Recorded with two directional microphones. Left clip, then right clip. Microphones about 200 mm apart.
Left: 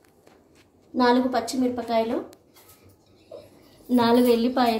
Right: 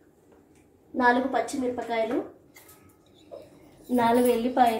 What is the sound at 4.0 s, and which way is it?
Speech, 55° left (ahead or behind).